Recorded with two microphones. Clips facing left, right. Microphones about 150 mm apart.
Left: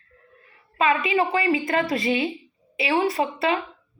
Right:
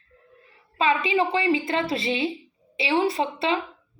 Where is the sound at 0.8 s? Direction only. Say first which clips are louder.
Left 1 dB; 30° right (ahead or behind).